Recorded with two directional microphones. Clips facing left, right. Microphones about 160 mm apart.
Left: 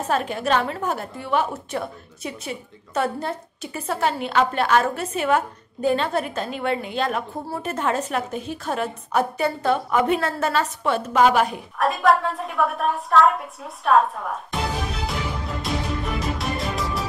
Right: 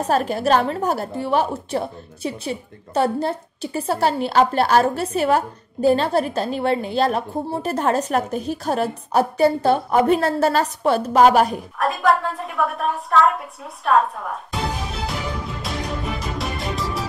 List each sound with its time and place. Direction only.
0.1 s a woman's voice: 40° right (ahead or behind)
11.8 s a woman's voice: centre (ahead or behind)
15.6 s music: centre (ahead or behind)